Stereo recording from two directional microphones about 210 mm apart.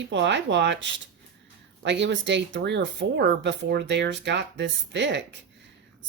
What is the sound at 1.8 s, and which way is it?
Speech, 55° right (ahead or behind).